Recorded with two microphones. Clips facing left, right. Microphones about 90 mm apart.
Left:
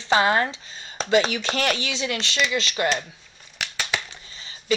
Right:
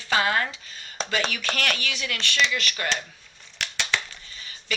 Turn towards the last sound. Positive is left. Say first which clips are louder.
# left 8 dB
turn(degrees=25)  # may be behind; listen again after turning